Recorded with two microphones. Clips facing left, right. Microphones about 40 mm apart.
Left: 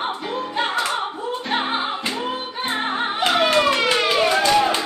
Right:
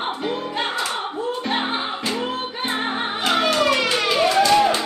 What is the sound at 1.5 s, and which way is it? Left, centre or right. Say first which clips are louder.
Music: left 4 dB; centre.